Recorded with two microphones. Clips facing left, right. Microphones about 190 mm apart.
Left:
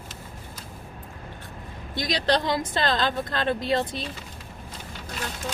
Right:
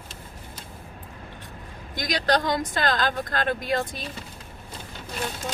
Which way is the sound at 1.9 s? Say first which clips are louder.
Even; 25° left (ahead or behind).